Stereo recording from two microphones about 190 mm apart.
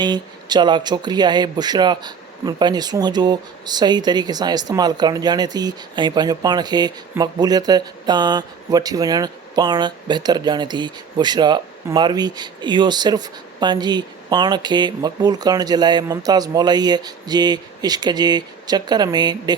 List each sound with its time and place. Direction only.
0.0 s speech: 20° right (ahead or behind)